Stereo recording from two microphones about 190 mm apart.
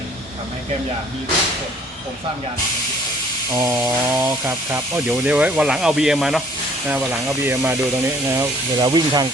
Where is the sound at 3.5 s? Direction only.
15° right (ahead or behind).